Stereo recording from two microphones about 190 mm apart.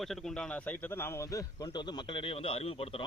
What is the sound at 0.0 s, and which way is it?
A man's voice, centre (ahead or behind).